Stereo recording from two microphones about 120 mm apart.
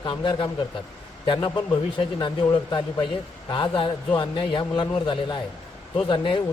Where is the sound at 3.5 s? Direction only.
45° left (ahead or behind).